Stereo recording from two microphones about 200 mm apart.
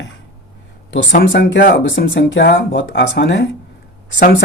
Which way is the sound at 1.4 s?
60° left (ahead or behind).